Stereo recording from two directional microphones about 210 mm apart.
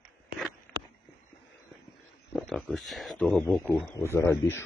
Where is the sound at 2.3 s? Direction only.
Centre (ahead or behind).